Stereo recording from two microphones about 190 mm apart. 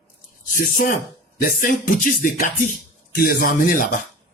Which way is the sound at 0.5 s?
50° left (ahead or behind).